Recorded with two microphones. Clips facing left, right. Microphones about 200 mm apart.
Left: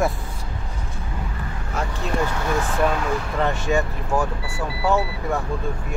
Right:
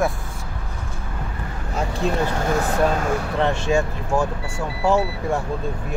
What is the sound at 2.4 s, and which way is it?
Speech, 45° right (ahead or behind).